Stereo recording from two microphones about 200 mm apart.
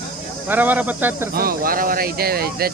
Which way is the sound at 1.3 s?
45° right (ahead or behind).